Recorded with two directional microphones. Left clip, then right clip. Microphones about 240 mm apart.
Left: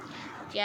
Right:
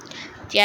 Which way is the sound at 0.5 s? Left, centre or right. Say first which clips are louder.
Right 13 dB; right.